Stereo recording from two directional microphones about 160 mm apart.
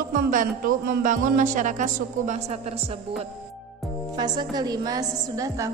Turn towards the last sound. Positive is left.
turn(degrees=-20)  # may be behind; listen again after turning